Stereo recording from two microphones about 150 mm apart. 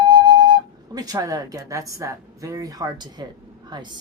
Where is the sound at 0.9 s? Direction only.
25° right (ahead or behind).